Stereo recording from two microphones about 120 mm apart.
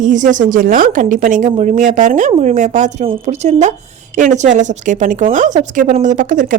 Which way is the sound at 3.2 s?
75° right (ahead or behind).